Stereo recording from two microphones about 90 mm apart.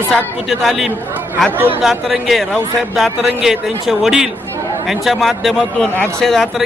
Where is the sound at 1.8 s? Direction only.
Centre (ahead or behind).